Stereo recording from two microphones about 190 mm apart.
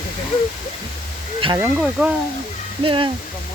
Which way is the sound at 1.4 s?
30° right (ahead or behind).